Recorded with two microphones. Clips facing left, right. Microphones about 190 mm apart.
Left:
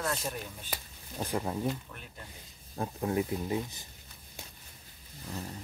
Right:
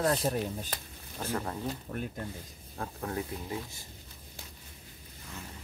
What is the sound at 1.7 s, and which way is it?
Speech, 45° right (ahead or behind).